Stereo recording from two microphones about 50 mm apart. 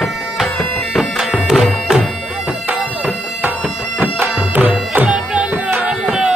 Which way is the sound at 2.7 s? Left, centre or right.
Right.